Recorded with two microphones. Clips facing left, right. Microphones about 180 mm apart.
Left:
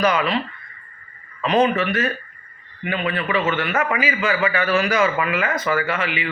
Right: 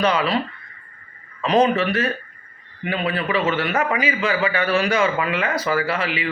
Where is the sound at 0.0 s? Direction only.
30° right (ahead or behind).